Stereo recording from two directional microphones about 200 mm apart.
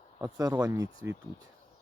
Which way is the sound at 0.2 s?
20° right (ahead or behind).